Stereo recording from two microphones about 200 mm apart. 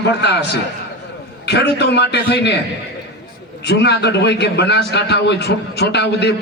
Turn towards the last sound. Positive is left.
turn(degrees=55)  # may be behind; listen again after turning